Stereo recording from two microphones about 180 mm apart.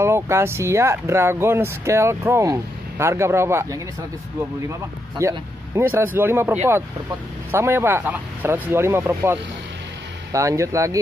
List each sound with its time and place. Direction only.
0.0 s speech: 15° right (ahead or behind)
5.2 s speech: 15° right (ahead or behind)
7.5 s speech: 15° right (ahead or behind)